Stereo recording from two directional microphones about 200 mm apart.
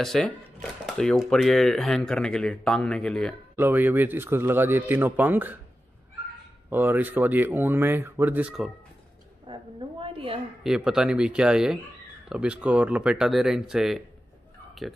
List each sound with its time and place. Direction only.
0.0 s speech: 5° left (ahead or behind)
3.5 s a man's voice: 10° right (ahead or behind)
6.7 s a man's voice: 10° right (ahead or behind)
9.5 s a woman's voice: 25° right (ahead or behind)
10.6 s speech: 5° right (ahead or behind)